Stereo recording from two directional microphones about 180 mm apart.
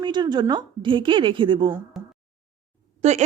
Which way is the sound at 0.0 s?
25° right (ahead or behind).